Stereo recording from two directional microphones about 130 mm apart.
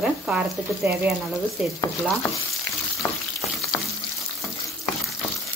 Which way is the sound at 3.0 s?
20° left (ahead or behind).